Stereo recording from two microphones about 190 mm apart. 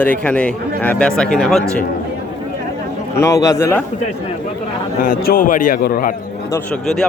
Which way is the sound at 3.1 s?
15° left (ahead or behind).